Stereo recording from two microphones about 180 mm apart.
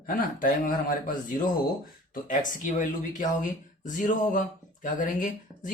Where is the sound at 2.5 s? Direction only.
45° left (ahead or behind).